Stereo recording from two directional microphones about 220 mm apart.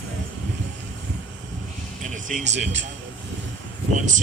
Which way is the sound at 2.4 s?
30° right (ahead or behind).